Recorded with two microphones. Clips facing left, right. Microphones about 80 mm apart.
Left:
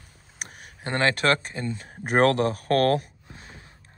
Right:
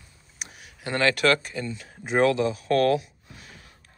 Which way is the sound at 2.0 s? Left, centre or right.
Left.